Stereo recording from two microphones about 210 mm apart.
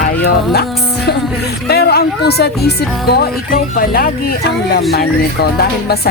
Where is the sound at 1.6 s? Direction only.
50° left (ahead or behind).